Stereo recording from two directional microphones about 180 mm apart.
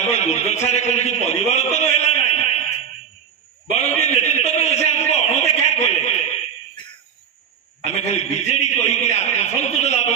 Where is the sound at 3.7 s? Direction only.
40° left (ahead or behind).